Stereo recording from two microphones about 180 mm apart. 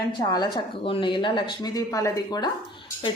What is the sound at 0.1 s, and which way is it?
Speech, 20° left (ahead or behind).